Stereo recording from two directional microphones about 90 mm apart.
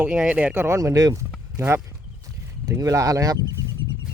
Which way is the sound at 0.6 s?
35° right (ahead or behind).